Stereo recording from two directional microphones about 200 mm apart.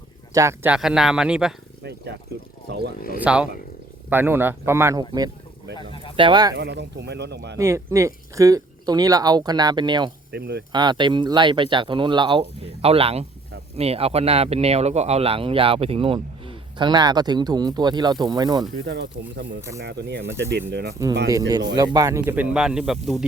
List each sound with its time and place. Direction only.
0.3 s speech: 10° right (ahead or behind)
1.8 s a sound: 55° right (ahead or behind)
3.2 s speech: 5° right (ahead or behind)
5.7 s a sound: 25° left (ahead or behind)
6.1 s speech: 25° right (ahead or behind)
6.6 s speech: 55° right (ahead or behind)
7.6 s speech: 15° right (ahead or behind)
10.3 s speech: 55° right (ahead or behind)
10.7 s speech: 20° right (ahead or behind)
18.9 s speech: 60° right (ahead or behind)
21.2 s speech: 15° right (ahead or behind); by 23.2 s centre (ahead or behind)